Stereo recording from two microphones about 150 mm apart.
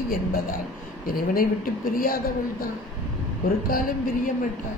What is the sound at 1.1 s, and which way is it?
A woman's voice, 75° left (ahead or behind).